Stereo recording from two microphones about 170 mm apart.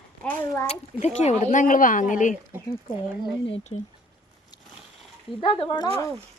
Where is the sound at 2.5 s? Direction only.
15° right (ahead or behind).